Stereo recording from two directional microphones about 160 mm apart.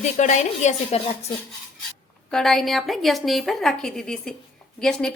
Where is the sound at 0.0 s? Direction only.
50° left (ahead or behind).